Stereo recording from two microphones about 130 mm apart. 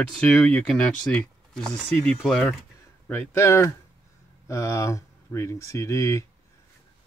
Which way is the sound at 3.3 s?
20° left (ahead or behind).